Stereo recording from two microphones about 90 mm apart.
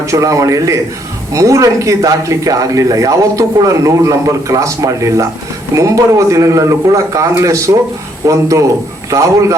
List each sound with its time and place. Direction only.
0.0 s speech: 35° right (ahead or behind)